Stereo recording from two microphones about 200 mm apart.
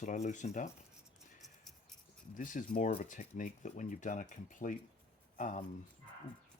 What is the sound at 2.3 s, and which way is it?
Speech, 40° left (ahead or behind).